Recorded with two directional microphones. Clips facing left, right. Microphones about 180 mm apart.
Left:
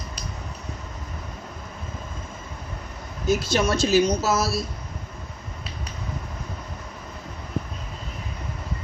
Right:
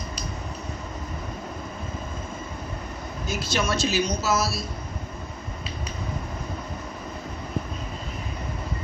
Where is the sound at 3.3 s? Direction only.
45° left (ahead or behind).